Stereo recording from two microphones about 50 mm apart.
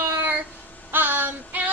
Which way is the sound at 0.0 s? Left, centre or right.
Right.